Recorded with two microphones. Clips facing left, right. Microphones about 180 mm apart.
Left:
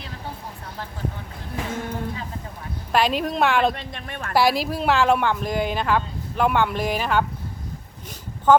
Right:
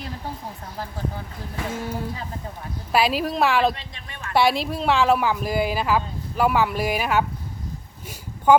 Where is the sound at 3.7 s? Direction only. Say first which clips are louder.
Left 6 dB; 55° left (ahead or behind).